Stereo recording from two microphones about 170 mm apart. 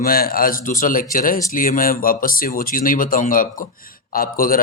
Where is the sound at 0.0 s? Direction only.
60° left (ahead or behind).